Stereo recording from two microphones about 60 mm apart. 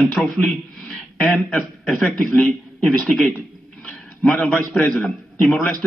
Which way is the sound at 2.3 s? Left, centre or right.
Left.